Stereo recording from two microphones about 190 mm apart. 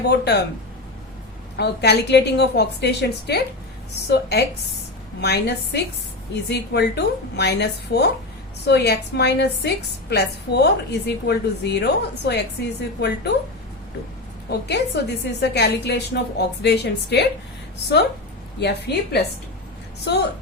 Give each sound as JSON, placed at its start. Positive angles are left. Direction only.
{"t": 0.1, "sound": "a woman's voice", "side_deg": 60}
{"t": 1.5, "sound": "a woman's voice", "side_deg": 60}
{"t": 14.7, "sound": "a woman's voice", "side_deg": 60}
{"t": 18.6, "sound": "a woman's voice", "side_deg": 60}